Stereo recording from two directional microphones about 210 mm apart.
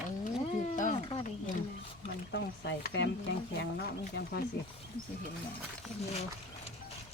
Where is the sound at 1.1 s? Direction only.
30° left (ahead or behind).